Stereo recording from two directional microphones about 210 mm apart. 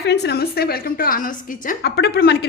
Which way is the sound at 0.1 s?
50° left (ahead or behind).